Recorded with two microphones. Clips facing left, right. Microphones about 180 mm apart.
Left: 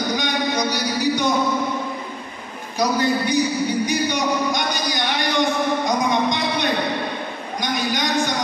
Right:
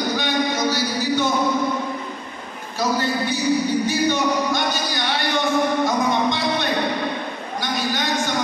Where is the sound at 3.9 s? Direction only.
15° left (ahead or behind).